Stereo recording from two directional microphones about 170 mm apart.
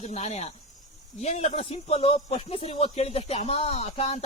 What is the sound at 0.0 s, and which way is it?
Speech, 40° left (ahead or behind).